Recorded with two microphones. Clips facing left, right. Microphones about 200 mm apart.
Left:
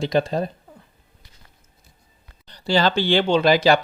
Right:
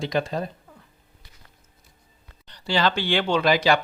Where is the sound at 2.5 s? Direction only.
35° left (ahead or behind).